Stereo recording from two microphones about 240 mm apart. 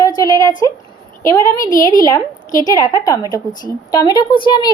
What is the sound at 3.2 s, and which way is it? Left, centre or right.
Speech, centre.